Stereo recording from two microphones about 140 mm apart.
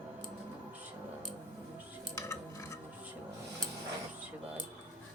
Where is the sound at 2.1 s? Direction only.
20° left (ahead or behind).